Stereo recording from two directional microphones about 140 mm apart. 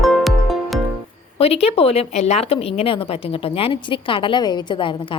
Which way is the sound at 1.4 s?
45° left (ahead or behind).